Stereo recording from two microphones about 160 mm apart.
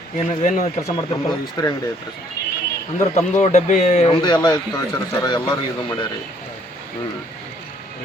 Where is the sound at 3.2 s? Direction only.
50° left (ahead or behind); by 6.1 s 30° left (ahead or behind).